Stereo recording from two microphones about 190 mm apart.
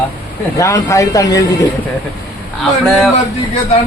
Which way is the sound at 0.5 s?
15° left (ahead or behind).